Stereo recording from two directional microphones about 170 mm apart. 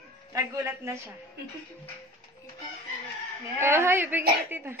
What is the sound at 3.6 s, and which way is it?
A woman's voice, 15° right (ahead or behind).